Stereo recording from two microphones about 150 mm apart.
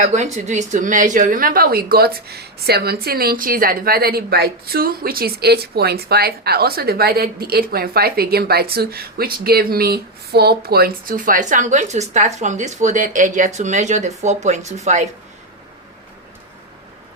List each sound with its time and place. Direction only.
0.0 s a woman's voice: 50° right (ahead or behind)